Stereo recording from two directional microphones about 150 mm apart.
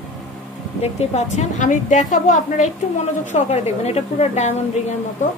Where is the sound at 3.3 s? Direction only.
45° left (ahead or behind).